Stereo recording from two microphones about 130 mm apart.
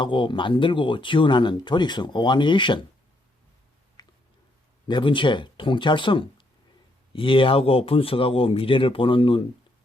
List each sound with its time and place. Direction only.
0.0 s speech: 40° left (ahead or behind)
4.0 s a sound: 30° left (ahead or behind)
4.9 s speech: 40° left (ahead or behind)